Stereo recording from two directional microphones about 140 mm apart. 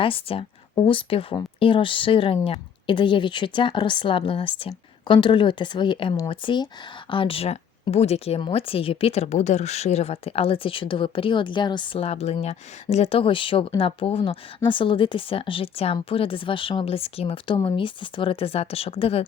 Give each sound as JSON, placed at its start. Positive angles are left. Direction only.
{"t": 0.0, "sound": "speech", "side_deg": 40}